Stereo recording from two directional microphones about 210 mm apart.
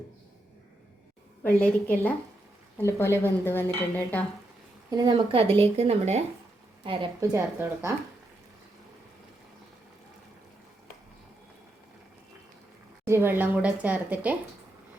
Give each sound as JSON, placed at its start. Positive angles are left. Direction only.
{"t": 1.5, "sound": "speech", "side_deg": 10}
{"t": 2.8, "sound": "speech", "side_deg": 10}
{"t": 4.9, "sound": "speech", "side_deg": -20}
{"t": 7.2, "sound": "a woman's voice", "side_deg": -15}
{"t": 13.1, "sound": "a woman's voice", "side_deg": -10}